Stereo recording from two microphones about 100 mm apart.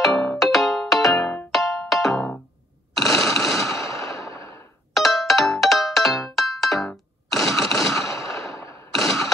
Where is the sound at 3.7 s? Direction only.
35° left (ahead or behind).